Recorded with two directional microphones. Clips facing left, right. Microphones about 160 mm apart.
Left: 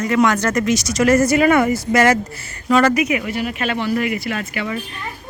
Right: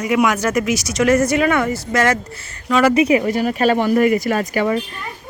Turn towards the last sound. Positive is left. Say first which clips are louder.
# right 6 dB
turn(degrees=-40)  # may be behind; listen again after turning